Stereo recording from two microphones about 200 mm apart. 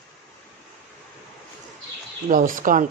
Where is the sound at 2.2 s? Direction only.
40° right (ahead or behind).